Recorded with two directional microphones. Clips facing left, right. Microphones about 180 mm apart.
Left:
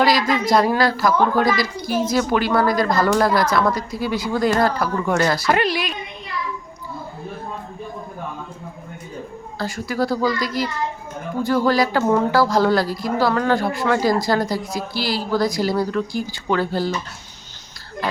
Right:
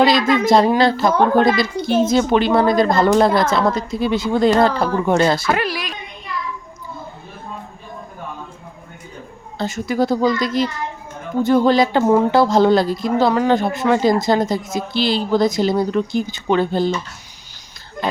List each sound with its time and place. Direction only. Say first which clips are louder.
0.0 s speech: right 3 dB; 25° right (ahead or behind)
5.5 s a woman's voice: left 1 dB; 5° right (ahead or behind)
9.6 s speech: right 4 dB; 20° right (ahead or behind)